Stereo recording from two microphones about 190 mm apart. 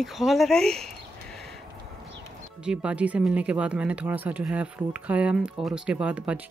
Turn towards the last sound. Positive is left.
turn(degrees=-5)  # may be behind; listen again after turning